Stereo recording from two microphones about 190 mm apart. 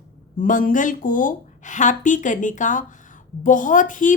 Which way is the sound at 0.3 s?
45° left (ahead or behind).